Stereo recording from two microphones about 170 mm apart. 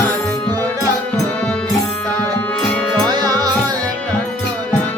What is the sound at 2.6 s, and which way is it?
Music, 5° left (ahead or behind).